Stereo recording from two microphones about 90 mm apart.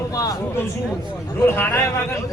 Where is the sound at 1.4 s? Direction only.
25° left (ahead or behind).